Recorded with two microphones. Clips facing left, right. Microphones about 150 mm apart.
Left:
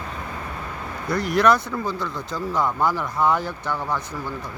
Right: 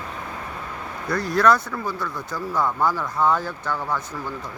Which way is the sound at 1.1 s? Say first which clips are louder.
Even; 15° left (ahead or behind).